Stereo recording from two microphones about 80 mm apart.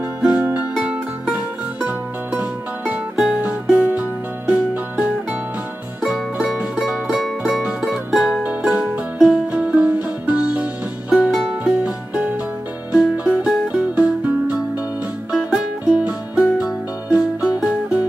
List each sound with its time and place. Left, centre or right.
0.2 s music: centre
15.8 s music: centre